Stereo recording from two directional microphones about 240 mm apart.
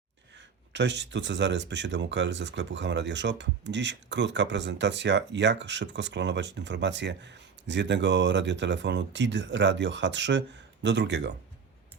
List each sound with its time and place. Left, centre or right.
0.7 s speech: right